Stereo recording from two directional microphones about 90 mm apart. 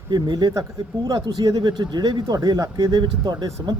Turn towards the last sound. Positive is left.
turn(degrees=-55)  # may be behind; listen again after turning